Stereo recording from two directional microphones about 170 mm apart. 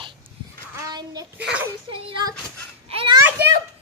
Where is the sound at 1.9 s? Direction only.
30° right (ahead or behind).